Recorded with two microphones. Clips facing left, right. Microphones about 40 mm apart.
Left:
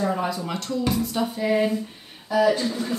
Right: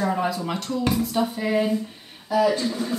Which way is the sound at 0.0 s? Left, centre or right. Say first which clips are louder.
Right 1 dB; centre.